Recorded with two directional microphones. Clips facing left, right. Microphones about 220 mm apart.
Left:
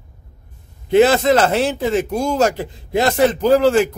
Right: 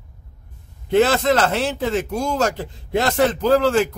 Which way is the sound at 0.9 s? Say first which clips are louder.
Left 4 dB; 15° left (ahead or behind).